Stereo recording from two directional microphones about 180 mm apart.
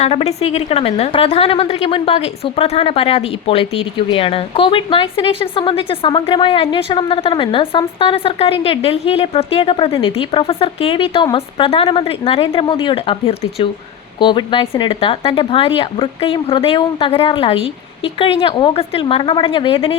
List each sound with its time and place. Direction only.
0.0 s a woman's voice: 35° left (ahead or behind)